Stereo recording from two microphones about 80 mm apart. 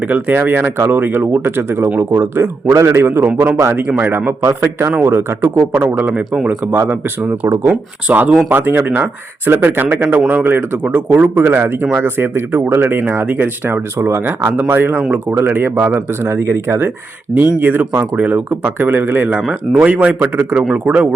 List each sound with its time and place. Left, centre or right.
0.1 s speech: right
6.7 s speech: right